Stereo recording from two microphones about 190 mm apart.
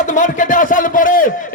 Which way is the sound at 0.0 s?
40° left (ahead or behind).